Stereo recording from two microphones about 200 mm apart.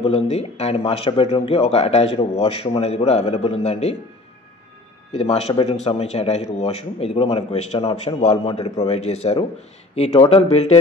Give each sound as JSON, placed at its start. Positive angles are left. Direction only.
{"t": 0.0, "sound": "speech", "side_deg": 30}
{"t": 5.1, "sound": "a man's voice", "side_deg": 30}